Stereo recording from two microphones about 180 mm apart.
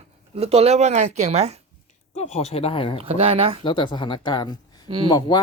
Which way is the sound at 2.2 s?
35° left (ahead or behind).